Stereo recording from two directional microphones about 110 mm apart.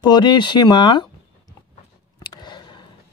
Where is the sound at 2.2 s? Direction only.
40° left (ahead or behind).